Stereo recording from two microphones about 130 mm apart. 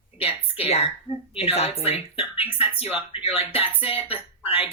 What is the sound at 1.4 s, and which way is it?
A woman's voice, 50° left (ahead or behind).